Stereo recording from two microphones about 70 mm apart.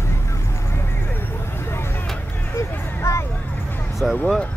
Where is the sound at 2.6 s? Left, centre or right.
Left.